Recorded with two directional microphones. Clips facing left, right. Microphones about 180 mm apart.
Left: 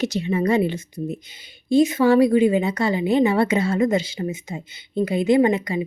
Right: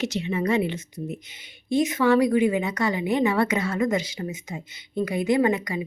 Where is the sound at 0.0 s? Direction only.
35° left (ahead or behind).